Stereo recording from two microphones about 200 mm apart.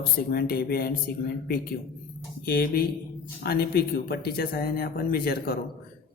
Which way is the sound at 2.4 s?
50° left (ahead or behind).